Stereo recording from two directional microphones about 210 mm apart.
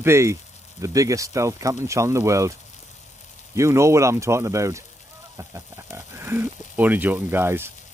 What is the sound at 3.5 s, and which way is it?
Speech, 15° right (ahead or behind).